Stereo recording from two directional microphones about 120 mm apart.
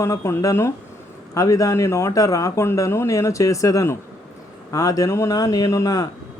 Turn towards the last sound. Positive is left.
turn(degrees=30)  # may be behind; listen again after turning